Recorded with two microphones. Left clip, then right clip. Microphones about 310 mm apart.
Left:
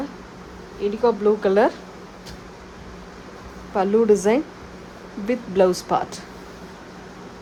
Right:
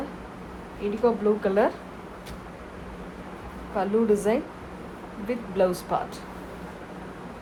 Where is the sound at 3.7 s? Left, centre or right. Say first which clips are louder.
Left 6 dB; left.